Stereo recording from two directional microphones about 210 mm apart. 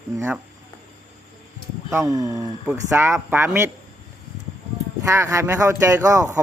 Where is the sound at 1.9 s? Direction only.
15° right (ahead or behind).